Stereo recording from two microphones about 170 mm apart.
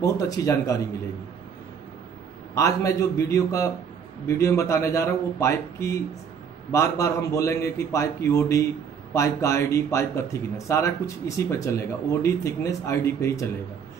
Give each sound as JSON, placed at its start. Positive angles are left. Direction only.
{"t": 0.0, "sound": "a man's voice", "side_deg": 20}
{"t": 2.5, "sound": "a man's voice", "side_deg": 20}